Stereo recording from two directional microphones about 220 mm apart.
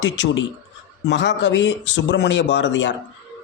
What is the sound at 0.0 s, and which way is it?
Speech, 60° left (ahead or behind).